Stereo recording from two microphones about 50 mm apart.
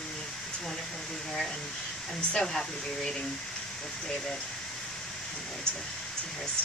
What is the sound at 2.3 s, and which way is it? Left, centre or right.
Speech, centre.